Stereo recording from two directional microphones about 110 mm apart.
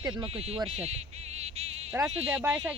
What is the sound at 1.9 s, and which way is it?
Speech, 20° right (ahead or behind).